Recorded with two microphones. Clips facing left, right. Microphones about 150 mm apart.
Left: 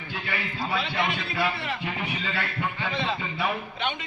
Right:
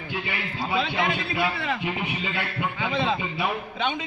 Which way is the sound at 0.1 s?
20° right (ahead or behind).